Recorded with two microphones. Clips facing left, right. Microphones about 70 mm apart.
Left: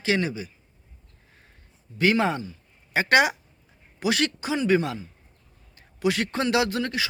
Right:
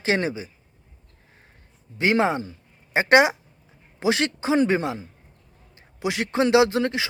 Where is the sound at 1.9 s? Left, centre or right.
Right.